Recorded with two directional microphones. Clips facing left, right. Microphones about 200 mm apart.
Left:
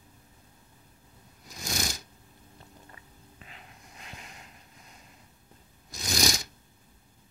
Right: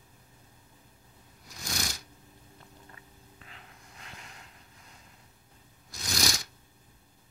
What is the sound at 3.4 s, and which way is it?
Snort, 20° left (ahead or behind).